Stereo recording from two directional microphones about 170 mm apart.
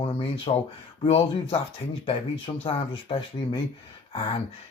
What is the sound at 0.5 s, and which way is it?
Speech, 35° left (ahead or behind).